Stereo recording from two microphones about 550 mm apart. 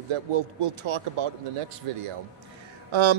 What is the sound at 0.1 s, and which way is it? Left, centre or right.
Speech, right.